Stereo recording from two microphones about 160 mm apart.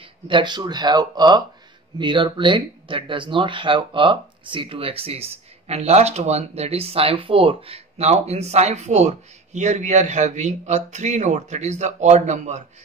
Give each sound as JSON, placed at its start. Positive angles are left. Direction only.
{"t": 0.0, "sound": "speech", "side_deg": -30}